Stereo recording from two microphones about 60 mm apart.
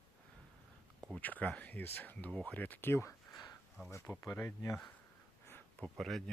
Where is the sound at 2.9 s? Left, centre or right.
Left.